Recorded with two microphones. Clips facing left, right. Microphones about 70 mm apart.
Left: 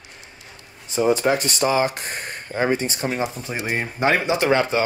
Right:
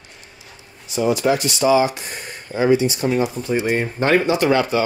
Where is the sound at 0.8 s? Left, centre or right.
Left.